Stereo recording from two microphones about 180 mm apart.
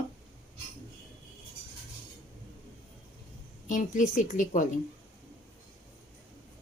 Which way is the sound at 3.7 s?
45° left (ahead or behind).